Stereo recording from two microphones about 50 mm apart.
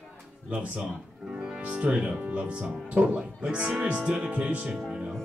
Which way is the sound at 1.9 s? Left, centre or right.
Right.